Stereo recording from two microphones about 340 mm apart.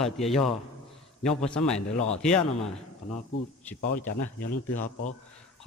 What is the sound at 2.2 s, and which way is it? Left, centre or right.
Speech, centre.